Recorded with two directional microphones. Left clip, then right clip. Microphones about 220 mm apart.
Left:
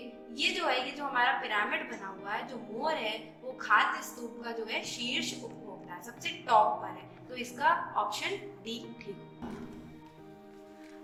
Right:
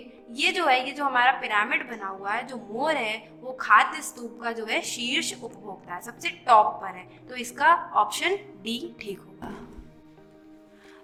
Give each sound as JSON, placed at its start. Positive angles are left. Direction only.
{"t": 0.3, "sound": "a woman's voice", "side_deg": -40}